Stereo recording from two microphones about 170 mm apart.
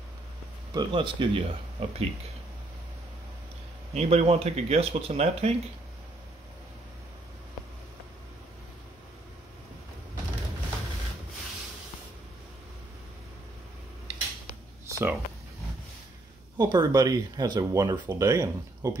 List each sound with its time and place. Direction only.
0.7 s speech: 30° right (ahead or behind)
3.9 s speech: 40° right (ahead or behind)
14.9 s a sound: 15° right (ahead or behind)
16.5 s speech: 25° right (ahead or behind)